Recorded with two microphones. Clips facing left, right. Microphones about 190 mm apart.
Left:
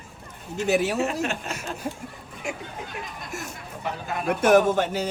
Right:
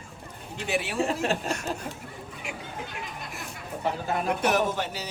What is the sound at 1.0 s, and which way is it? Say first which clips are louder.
Speech: even; 35° right (ahead or behind).